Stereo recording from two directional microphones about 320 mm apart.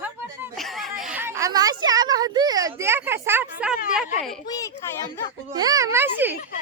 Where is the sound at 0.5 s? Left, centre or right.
Centre.